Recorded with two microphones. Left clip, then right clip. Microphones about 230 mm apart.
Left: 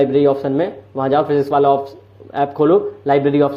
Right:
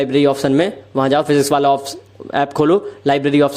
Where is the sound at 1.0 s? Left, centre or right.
Right.